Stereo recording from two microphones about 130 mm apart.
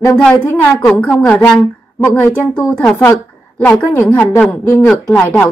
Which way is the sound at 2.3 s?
10° left (ahead or behind).